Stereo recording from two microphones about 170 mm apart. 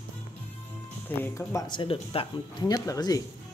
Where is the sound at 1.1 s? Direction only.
20° left (ahead or behind).